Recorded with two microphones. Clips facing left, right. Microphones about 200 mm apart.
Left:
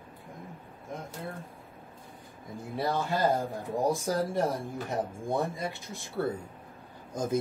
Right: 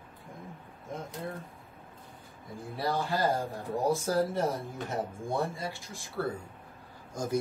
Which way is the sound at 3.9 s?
15° left (ahead or behind).